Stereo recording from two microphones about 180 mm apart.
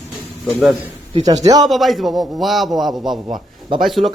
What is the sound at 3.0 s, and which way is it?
Speech, 25° right (ahead or behind).